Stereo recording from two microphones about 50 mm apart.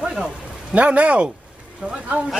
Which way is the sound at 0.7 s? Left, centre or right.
Right.